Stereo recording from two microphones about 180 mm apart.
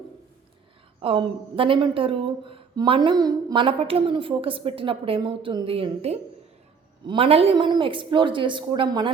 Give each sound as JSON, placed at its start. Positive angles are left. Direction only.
{"t": 1.0, "sound": "a woman's voice", "side_deg": -30}